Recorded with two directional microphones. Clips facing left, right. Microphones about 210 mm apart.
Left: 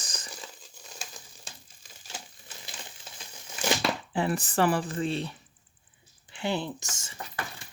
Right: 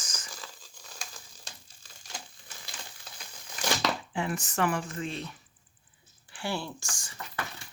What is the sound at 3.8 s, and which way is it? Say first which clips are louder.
Speech: left 3 dB; 35° left (ahead or behind).